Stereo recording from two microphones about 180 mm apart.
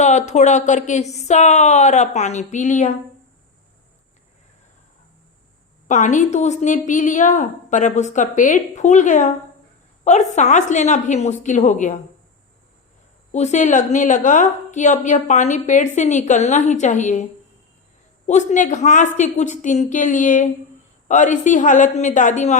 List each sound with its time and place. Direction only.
0.0 s speech: 40° left (ahead or behind)
5.9 s a woman's voice: 45° left (ahead or behind)
13.3 s a woman's voice: 40° left (ahead or behind)
18.3 s a woman's voice: 40° left (ahead or behind)